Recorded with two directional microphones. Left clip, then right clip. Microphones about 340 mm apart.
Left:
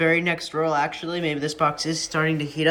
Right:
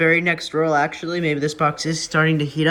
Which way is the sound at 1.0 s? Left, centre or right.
Right.